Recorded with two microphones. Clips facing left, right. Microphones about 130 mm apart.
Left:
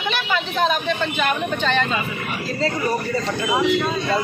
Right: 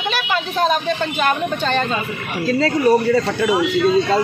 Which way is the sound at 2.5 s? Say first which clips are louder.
Right 8 dB; 70° right (ahead or behind).